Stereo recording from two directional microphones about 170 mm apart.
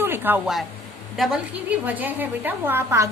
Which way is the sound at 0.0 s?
10° right (ahead or behind).